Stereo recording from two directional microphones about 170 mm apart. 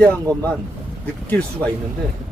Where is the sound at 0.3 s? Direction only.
5° left (ahead or behind).